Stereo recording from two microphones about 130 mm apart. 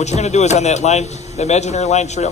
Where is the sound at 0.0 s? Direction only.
60° left (ahead or behind).